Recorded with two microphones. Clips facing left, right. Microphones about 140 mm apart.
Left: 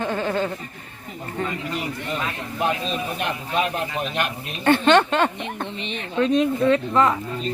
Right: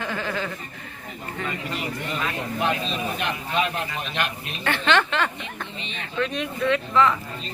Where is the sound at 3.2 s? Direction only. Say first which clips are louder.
Left 2 dB; 45° left (ahead or behind).